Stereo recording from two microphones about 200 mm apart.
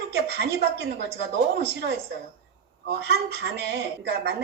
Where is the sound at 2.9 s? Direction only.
55° right (ahead or behind).